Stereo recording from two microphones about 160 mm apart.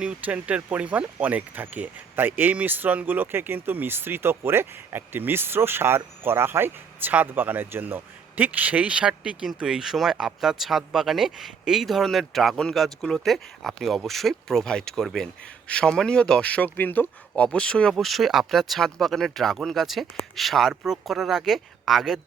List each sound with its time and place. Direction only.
0.0 s speech: 10° right (ahead or behind)